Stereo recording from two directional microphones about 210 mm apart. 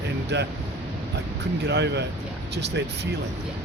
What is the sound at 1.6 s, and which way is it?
Speech, 55° right (ahead or behind).